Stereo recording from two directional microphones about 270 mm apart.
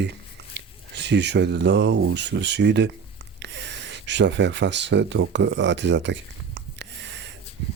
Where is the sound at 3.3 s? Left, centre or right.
Right.